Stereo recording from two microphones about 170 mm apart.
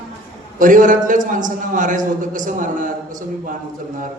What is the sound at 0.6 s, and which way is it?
A man's voice, 50° right (ahead or behind).